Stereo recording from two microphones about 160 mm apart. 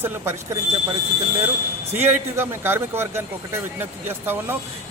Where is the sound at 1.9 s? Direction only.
15° right (ahead or behind).